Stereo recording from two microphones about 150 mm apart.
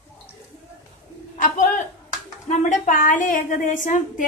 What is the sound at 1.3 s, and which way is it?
A man's voice, 60° left (ahead or behind).